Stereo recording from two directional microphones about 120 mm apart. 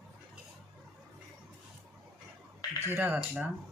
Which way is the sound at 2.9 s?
20° right (ahead or behind).